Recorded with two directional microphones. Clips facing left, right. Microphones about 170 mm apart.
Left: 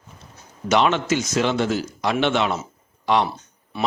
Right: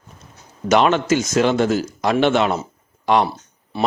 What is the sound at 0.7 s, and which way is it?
Speech, 50° right (ahead or behind).